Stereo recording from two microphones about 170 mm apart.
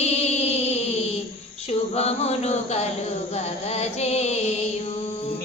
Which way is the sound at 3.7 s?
40° left (ahead or behind).